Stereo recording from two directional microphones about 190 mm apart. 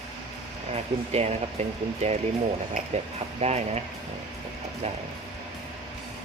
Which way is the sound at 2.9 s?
35° right (ahead or behind).